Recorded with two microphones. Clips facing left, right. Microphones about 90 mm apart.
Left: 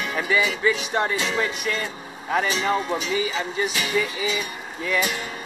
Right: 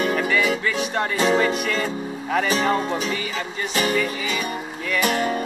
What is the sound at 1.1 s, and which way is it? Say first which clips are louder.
Music: right 6 dB; 40° right (ahead or behind).